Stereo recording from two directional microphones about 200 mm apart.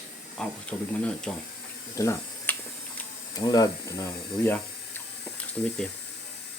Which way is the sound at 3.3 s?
20° left (ahead or behind).